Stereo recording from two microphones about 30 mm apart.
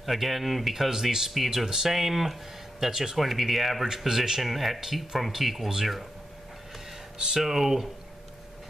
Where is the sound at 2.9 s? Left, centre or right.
Centre.